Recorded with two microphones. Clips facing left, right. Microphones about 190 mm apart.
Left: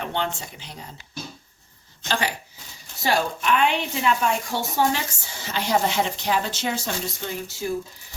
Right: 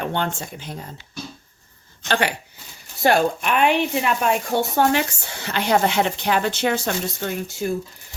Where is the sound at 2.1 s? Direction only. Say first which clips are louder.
Right 4 dB; 65° right (ahead or behind).